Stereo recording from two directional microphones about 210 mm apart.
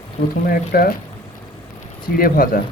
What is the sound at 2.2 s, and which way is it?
Speech, 45° left (ahead or behind).